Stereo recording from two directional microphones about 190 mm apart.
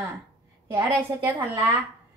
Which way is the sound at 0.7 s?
15° right (ahead or behind).